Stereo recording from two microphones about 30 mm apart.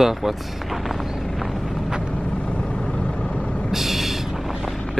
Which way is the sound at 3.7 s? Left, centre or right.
Centre.